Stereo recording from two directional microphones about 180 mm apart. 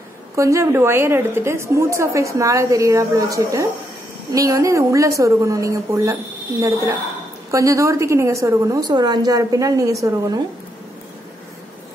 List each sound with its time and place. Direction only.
0.4 s a woman's voice: 15° right (ahead or behind)
7.5 s a woman's voice: 15° right (ahead or behind)